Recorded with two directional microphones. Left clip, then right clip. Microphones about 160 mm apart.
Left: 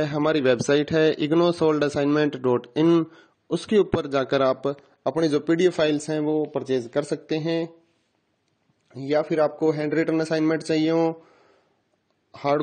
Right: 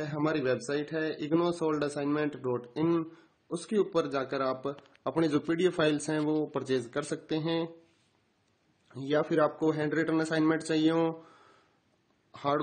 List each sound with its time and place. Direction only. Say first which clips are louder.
0.0 s speech: left 9 dB; 55° left (ahead or behind)
5.0 s speech: left 7 dB; 30° left (ahead or behind)
8.9 s speech: left 6 dB; 35° left (ahead or behind)
12.3 s speech: left 7 dB; 35° left (ahead or behind)